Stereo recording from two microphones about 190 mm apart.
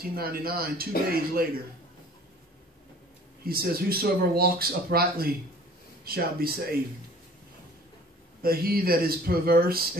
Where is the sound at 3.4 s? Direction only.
50° right (ahead or behind).